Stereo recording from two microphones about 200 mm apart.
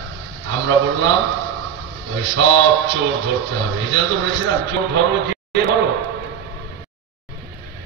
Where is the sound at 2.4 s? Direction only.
70° right (ahead or behind).